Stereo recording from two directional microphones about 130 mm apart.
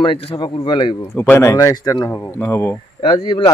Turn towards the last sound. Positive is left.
turn(degrees=45)  # may be behind; listen again after turning